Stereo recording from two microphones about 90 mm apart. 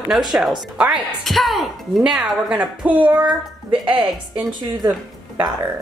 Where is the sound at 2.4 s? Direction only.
15° right (ahead or behind).